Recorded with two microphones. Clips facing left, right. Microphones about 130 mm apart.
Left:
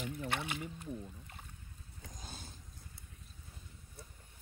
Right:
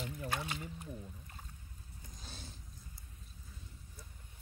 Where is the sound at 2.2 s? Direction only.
50° left (ahead or behind).